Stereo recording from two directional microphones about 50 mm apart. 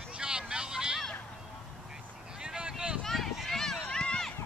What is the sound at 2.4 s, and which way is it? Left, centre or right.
Vehicle, centre.